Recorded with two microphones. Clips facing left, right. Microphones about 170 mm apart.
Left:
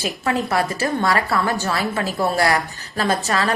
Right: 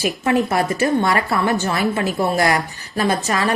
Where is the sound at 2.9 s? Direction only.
20° right (ahead or behind).